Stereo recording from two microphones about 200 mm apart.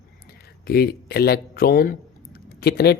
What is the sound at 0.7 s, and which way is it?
Speech, 50° left (ahead or behind).